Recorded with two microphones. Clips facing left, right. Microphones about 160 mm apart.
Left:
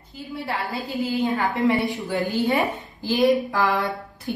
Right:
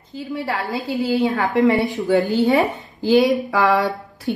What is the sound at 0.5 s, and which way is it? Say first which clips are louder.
A woman's voice: right 3 dB; 85° right.